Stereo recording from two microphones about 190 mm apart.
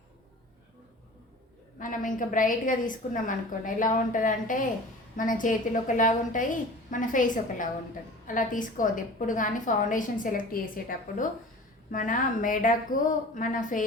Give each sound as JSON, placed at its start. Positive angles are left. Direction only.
{"t": 1.8, "sound": "a woman's voice", "side_deg": 45}